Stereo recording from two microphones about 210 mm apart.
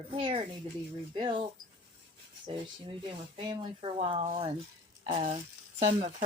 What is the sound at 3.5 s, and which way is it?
Speech, 25° right (ahead or behind).